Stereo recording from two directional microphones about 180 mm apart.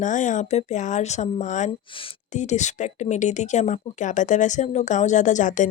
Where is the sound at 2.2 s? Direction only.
40° left (ahead or behind).